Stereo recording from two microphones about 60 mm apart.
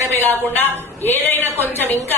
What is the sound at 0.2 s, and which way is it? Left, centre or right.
A woman's voice, left.